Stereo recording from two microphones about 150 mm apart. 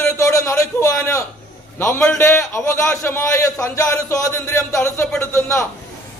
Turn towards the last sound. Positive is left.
turn(degrees=20)  # may be behind; listen again after turning